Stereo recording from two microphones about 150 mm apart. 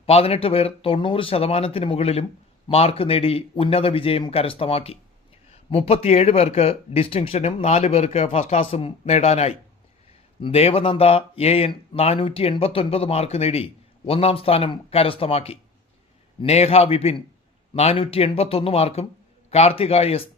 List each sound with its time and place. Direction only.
0.0 s speech: 40° left (ahead or behind)